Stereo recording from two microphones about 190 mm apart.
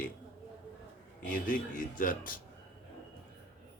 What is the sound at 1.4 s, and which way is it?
Speech, 45° left (ahead or behind).